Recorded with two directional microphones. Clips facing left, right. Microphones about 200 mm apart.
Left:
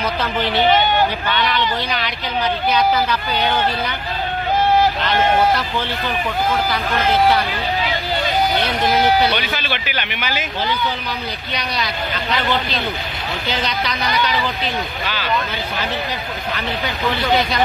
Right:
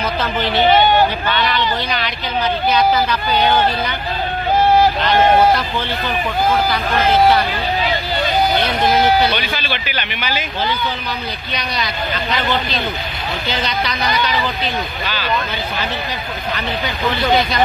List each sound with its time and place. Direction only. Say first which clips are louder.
0.7 s speech: right 5 dB; 35° right (ahead or behind)
1.9 s speech: right 1 dB; 10° left (ahead or behind)
11.5 s speech: right 1 dB; 10° left (ahead or behind)
13.5 s speech: right 1 dB; 10° left (ahead or behind)